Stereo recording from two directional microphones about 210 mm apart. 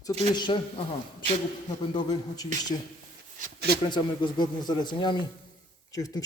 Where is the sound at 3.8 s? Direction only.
20° left (ahead or behind).